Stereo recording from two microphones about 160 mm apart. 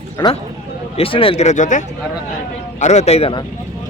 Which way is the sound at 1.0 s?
35° left (ahead or behind).